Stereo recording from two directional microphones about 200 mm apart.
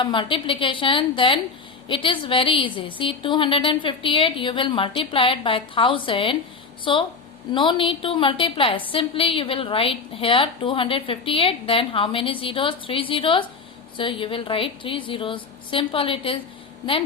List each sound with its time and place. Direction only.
0.0 s a woman's voice: 25° left (ahead or behind)